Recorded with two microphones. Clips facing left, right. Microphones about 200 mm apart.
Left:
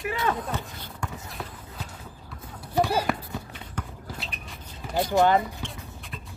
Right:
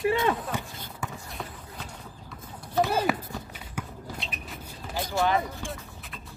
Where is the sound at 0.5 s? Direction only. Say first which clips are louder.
Even; 15° right (ahead or behind).